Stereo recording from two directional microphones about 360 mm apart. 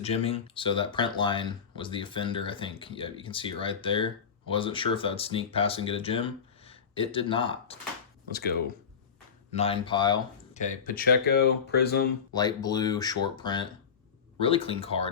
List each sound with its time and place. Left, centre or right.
0.0 s speech: centre
8.3 s speech: left
12.3 s speech: centre